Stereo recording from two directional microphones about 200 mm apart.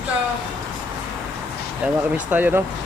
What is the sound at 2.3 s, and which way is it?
Speech, 10° right (ahead or behind).